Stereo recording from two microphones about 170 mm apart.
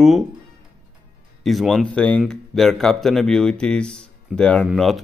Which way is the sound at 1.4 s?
Centre (ahead or behind).